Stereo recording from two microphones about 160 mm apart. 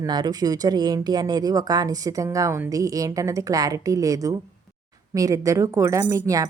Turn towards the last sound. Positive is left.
turn(degrees=-20)  # may be behind; listen again after turning